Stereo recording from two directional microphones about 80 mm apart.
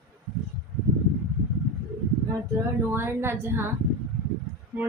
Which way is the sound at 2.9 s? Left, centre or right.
Right.